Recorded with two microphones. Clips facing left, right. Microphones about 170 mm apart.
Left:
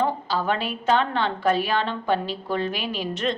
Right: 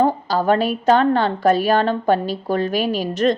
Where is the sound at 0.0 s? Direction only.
40° right (ahead or behind).